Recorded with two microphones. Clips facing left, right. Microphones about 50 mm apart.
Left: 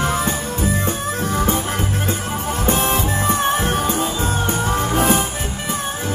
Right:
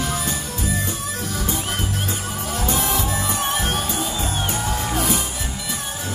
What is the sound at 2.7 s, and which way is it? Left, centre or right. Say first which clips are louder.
Music: left 5 dB; left.